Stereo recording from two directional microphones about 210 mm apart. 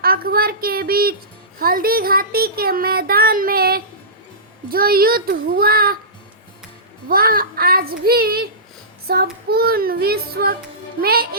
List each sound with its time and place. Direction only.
0.0 s a sound: 45° right (ahead or behind)
1.5 s speech: 45° right (ahead or behind)
7.1 s speech: 45° right (ahead or behind)